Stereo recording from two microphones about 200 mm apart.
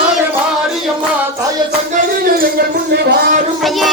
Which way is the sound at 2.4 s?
50° right (ahead or behind).